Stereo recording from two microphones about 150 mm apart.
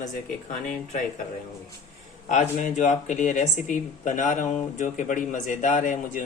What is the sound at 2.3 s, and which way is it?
Speech, 55° left (ahead or behind).